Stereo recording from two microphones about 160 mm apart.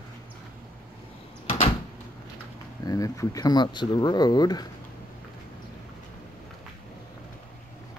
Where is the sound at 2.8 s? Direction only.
20° left (ahead or behind).